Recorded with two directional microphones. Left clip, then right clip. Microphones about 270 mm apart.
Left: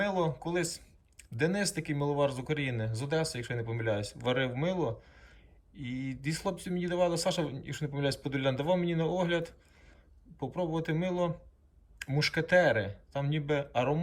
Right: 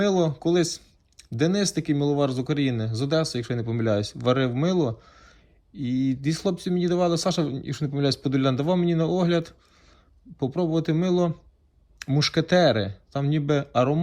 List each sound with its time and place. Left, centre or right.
0.0 s a sound: right
0.3 s speech: centre
5.7 s speech: centre
10.6 s speech: centre
12.6 s speech: right
13.1 s speech: centre